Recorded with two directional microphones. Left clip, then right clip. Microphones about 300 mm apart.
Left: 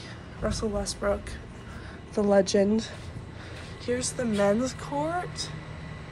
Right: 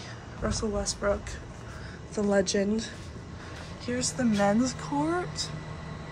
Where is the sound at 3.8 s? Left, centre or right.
Centre.